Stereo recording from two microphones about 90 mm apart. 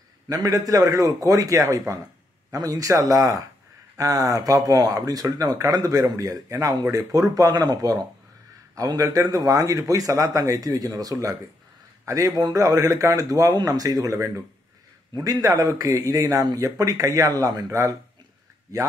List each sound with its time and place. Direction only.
0.3 s speech: 40° right (ahead or behind)